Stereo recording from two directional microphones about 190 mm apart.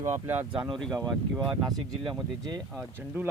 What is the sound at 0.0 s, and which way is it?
Speech, 10° right (ahead or behind).